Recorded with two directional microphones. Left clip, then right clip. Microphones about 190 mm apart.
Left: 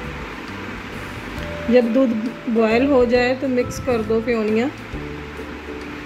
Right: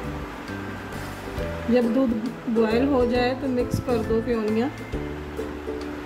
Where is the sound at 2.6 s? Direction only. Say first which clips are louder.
Left 5 dB; 20° left (ahead or behind).